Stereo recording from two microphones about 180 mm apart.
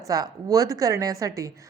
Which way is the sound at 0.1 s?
20° right (ahead or behind).